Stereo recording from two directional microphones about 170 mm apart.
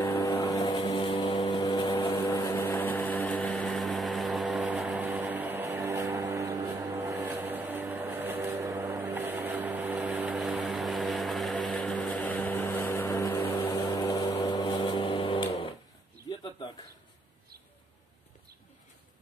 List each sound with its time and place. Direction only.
0.0 s vehicle: 20° left (ahead or behind)